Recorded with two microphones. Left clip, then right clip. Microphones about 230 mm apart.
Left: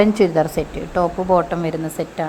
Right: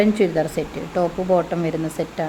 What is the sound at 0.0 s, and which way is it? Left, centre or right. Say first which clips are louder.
Speech: left 3 dB; centre.